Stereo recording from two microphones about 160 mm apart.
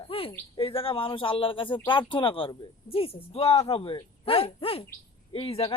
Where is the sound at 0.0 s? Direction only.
35° left (ahead or behind).